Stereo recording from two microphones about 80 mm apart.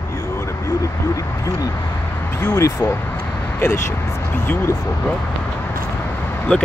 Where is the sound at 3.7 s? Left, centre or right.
Left.